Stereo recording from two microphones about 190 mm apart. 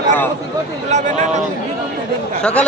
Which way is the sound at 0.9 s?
35° right (ahead or behind).